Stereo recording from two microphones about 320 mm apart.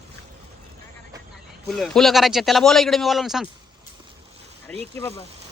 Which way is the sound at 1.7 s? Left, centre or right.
Centre.